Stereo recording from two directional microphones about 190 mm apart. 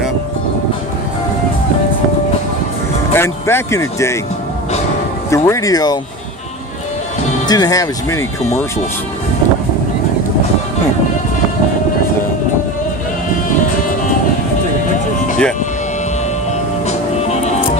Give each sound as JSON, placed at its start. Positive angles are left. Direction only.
{"t": 3.1, "sound": "speech", "side_deg": 15}
{"t": 5.3, "sound": "speech", "side_deg": 15}
{"t": 7.4, "sound": "speech", "side_deg": 20}
{"t": 16.8, "sound": "music", "side_deg": 35}